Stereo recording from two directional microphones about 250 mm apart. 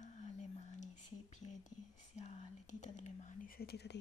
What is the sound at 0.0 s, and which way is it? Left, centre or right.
Whispering, left.